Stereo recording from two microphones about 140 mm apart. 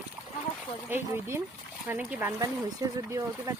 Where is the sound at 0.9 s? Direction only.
15° right (ahead or behind).